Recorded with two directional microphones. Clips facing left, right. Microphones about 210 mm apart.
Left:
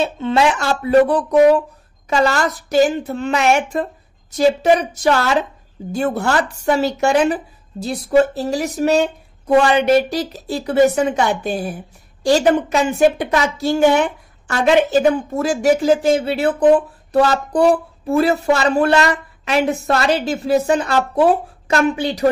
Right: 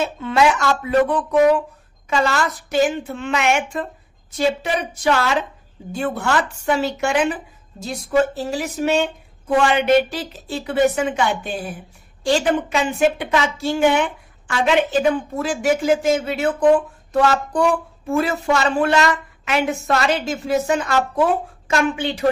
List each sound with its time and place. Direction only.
0.0 s speech: 30° left (ahead or behind)